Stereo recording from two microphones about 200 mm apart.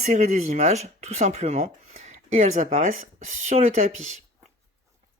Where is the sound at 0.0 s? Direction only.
35° right (ahead or behind).